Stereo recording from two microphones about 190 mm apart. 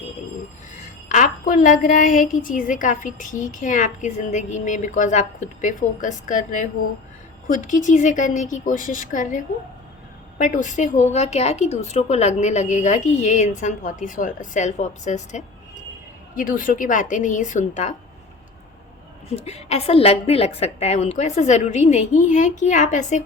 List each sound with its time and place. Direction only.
1.0 s a woman's voice: 40° left (ahead or behind)
19.4 s speech: 35° left (ahead or behind)